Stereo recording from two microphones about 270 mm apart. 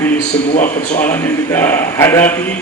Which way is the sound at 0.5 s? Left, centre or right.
Left.